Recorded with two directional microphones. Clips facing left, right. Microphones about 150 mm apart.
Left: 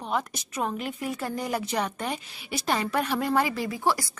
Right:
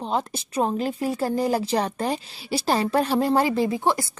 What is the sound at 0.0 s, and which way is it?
A woman's voice, 30° right (ahead or behind).